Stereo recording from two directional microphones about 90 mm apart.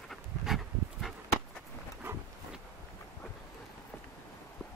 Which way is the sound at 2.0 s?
25° right (ahead or behind).